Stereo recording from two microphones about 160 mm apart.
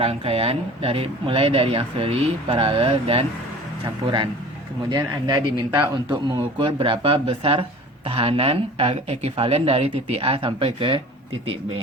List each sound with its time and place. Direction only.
0.0 s a man's voice: 35° right (ahead or behind)